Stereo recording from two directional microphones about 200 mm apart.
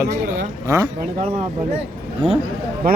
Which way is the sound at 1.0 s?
40° right (ahead or behind).